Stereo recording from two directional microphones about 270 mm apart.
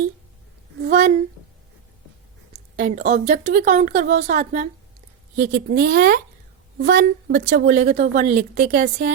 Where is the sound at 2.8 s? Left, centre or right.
Right.